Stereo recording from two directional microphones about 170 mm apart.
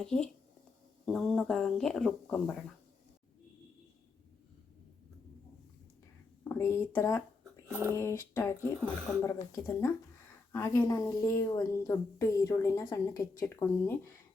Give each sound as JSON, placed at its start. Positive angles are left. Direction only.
{"t": 0.0, "sound": "speech", "side_deg": 5}
{"t": 6.5, "sound": "a woman's voice", "side_deg": 15}
{"t": 7.7, "sound": "speech", "side_deg": -15}
{"t": 7.9, "sound": "a woman's voice", "side_deg": 15}